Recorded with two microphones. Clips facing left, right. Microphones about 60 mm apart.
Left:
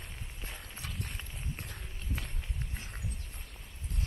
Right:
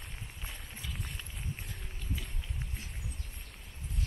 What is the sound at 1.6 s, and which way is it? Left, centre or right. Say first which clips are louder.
Run: even; left.